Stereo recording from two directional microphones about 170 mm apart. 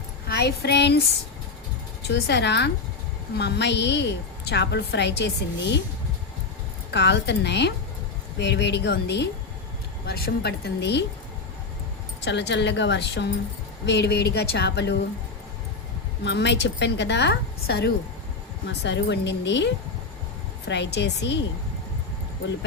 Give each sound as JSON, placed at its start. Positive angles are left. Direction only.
{"t": 0.3, "sound": "child singing", "side_deg": 75}
{"t": 2.0, "sound": "a woman's voice", "side_deg": 90}
{"t": 6.9, "sound": "a woman's voice", "side_deg": 90}
{"t": 10.1, "sound": "speech", "side_deg": 65}
{"t": 12.2, "sound": "a woman's voice", "side_deg": 90}
{"t": 16.2, "sound": "a woman's voice", "side_deg": 90}
{"t": 18.6, "sound": "a woman's voice", "side_deg": 90}